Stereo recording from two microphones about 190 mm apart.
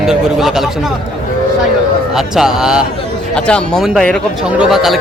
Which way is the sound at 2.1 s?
5° right (ahead or behind).